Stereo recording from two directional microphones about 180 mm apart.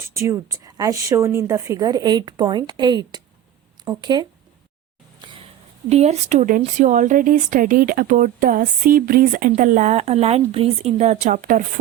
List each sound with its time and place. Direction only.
0.1 s a woman's voice: 15° right (ahead or behind)
5.2 s a sound: 25° right (ahead or behind)
5.9 s speech: 35° right (ahead or behind)